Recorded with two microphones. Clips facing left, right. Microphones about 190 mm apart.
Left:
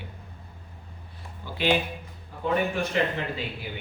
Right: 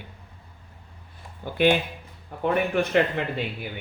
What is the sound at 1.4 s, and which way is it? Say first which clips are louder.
Speech: right 5 dB; 55° right (ahead or behind).